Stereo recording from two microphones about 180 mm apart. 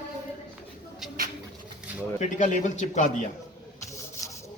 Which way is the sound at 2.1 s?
45° left (ahead or behind).